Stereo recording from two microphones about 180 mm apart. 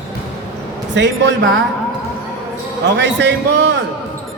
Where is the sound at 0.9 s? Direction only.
80° right.